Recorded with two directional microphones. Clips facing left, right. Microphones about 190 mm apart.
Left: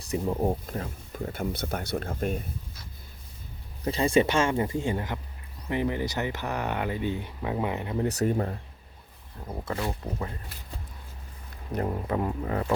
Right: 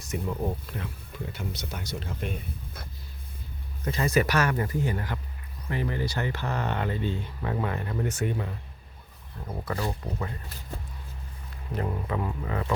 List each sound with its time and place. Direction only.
0.0 s speech: 35° left (ahead or behind); by 2.4 s 50° left (ahead or behind)
3.8 s speech: 30° left (ahead or behind)
8.0 s speech: 40° left (ahead or behind)
9.6 s speech: 20° left (ahead or behind)
12.0 s speech: 40° left (ahead or behind)